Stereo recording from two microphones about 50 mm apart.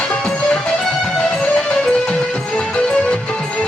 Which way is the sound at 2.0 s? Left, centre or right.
Centre.